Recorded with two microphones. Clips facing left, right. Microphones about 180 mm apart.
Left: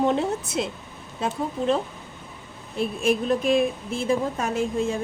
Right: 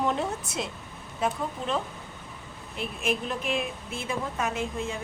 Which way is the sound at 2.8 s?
35° left (ahead or behind).